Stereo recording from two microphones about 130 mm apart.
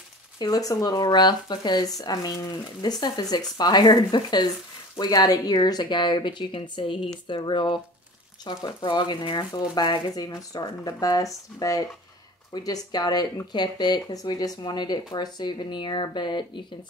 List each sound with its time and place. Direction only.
0.4 s speech: 30° left (ahead or behind)